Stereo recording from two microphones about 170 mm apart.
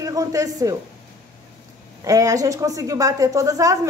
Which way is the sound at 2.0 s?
20° right (ahead or behind).